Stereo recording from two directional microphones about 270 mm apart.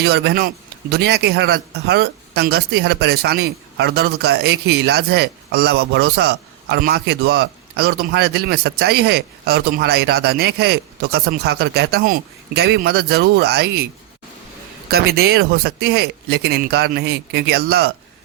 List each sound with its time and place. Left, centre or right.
0.0 s a man's voice: right
14.8 s a man's voice: right